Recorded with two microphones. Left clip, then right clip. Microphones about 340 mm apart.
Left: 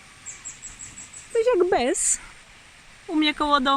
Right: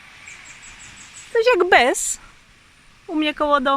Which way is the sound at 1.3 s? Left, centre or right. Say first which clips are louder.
Right 6 dB; right.